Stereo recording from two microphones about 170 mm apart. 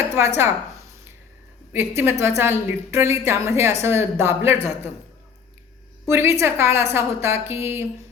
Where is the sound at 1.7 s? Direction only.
15° right (ahead or behind).